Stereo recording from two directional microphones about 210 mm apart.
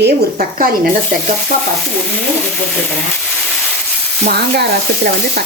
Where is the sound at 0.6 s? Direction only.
40° right (ahead or behind).